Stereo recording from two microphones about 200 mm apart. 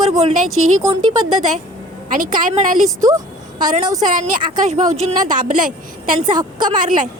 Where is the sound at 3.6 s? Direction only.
40° right (ahead or behind).